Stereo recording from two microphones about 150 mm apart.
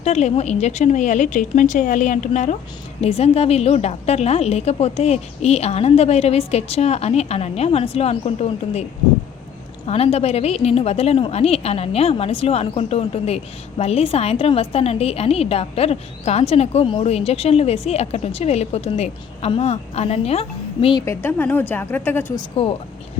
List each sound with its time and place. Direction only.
0.0 s a woman's voice: 45° left (ahead or behind)
9.8 s a woman's voice: 40° left (ahead or behind)
21.0 s a woman's voice: 15° left (ahead or behind)
22.4 s speech: 35° left (ahead or behind)